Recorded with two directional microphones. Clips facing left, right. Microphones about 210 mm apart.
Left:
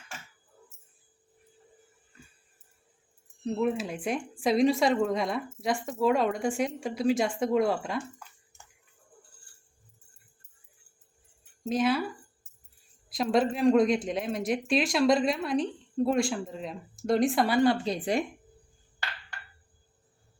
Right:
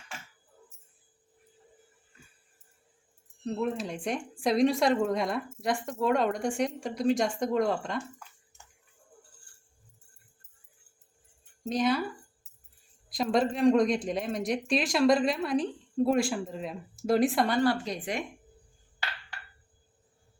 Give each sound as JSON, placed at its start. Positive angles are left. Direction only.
{"t": 3.4, "sound": "a woman's voice", "side_deg": 5}
{"t": 11.6, "sound": "speech", "side_deg": 5}
{"t": 13.1, "sound": "a woman's voice", "side_deg": 0}
{"t": 17.6, "sound": "speech", "side_deg": 25}